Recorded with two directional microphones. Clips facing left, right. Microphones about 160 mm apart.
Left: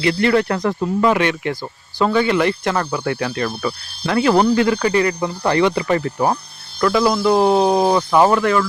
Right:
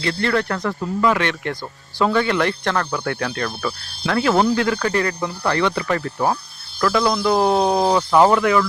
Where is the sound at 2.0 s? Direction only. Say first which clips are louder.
Left 2 dB; centre (ahead or behind).